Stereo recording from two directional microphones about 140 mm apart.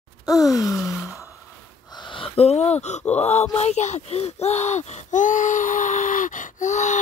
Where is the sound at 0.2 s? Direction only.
25° left (ahead or behind).